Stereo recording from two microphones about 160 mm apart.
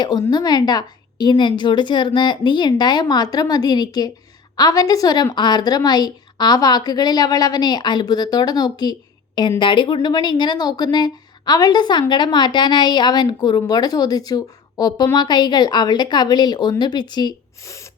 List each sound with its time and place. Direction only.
0.0 s a woman's voice: 25° left (ahead or behind)